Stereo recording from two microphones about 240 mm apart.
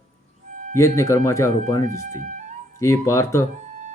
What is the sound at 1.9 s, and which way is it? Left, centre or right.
Speech, right.